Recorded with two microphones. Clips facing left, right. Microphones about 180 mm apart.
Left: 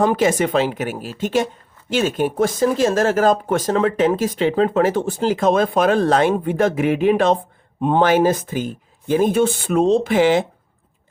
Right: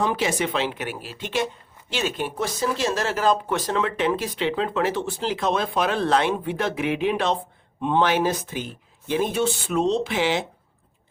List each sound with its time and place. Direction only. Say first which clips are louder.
0.0 s speech: left 7 dB; 45° left (ahead or behind)